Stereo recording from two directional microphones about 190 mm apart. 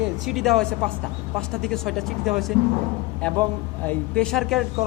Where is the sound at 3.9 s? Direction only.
5° left (ahead or behind).